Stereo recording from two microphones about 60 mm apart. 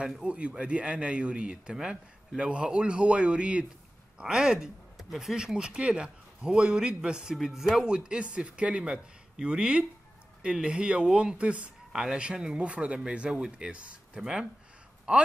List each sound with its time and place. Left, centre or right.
0.0 s speech: centre